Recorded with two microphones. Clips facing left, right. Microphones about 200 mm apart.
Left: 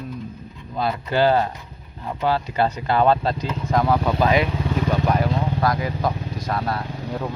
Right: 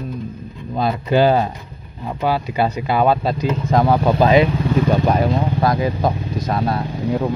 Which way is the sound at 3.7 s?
30° right (ahead or behind).